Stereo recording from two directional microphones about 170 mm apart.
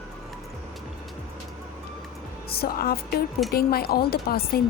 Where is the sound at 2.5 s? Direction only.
65° left (ahead or behind).